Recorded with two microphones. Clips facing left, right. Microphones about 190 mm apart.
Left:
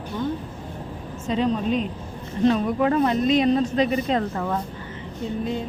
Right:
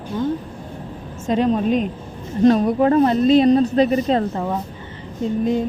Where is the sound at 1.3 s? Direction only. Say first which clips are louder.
Right 5 dB; 50° right (ahead or behind); by 4.2 s 35° right (ahead or behind).